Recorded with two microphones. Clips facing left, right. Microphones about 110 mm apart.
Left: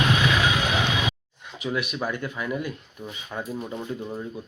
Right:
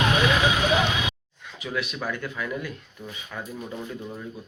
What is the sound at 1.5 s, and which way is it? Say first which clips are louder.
Speech: left 2 dB; 20° left (ahead or behind).